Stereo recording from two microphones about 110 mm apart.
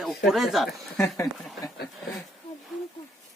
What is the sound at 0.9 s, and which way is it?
Speech, 25° left (ahead or behind).